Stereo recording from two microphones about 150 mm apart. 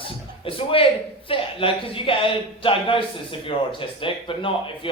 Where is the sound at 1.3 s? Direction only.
35° left (ahead or behind).